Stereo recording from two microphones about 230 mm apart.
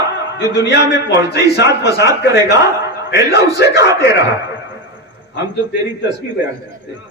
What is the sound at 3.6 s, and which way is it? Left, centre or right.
Speech, left.